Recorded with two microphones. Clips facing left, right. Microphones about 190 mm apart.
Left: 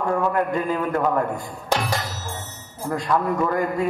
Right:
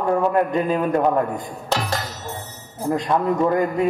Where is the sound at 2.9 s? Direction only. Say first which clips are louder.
Right 2 dB; 20° right (ahead or behind).